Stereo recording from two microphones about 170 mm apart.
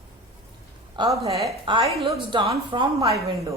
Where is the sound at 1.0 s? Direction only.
20° right (ahead or behind); by 3.3 s 35° right (ahead or behind).